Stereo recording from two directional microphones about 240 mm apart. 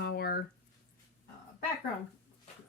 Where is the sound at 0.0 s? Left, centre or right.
Left.